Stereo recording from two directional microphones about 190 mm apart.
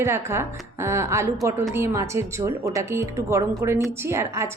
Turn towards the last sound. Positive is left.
turn(degrees=-15)  # may be behind; listen again after turning